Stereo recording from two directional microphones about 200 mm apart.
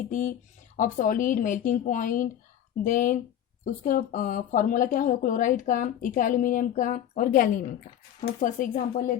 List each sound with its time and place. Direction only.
0.1 s speech: 40° left (ahead or behind)